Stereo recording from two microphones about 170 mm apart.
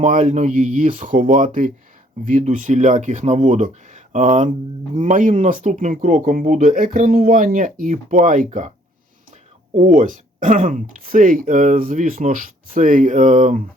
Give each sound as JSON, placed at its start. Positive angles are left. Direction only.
{"t": 0.0, "sound": "speech", "side_deg": -45}
{"t": 9.7, "sound": "speech", "side_deg": -45}